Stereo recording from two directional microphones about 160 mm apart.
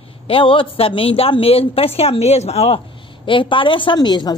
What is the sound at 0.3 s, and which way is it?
A woman's voice, 35° left (ahead or behind).